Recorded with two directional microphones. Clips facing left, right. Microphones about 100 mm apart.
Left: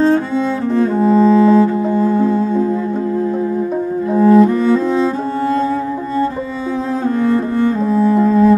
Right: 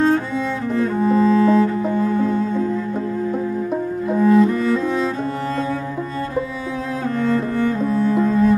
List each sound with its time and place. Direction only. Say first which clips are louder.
0.7 s cello: left 5 dB; 30° left (ahead or behind)
4.2 s cello: left 5 dB; 30° left (ahead or behind)
7.3 s cello: left 4 dB; 30° left (ahead or behind)